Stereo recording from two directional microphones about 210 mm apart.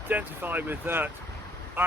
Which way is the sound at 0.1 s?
10° right (ahead or behind).